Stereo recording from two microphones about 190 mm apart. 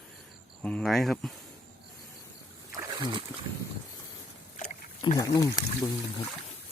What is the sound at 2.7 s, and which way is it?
Splash, 20° right (ahead or behind).